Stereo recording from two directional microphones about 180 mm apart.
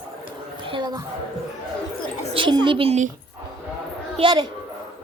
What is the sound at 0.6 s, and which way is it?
Speech, 25° right (ahead or behind).